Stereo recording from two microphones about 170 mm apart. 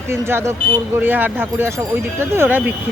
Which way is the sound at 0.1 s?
15° right (ahead or behind).